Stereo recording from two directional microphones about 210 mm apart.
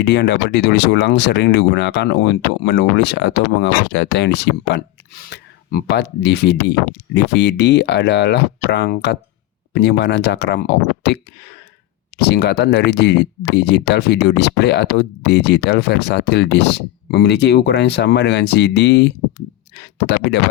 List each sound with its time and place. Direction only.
0.0 s speech: 55° left (ahead or behind)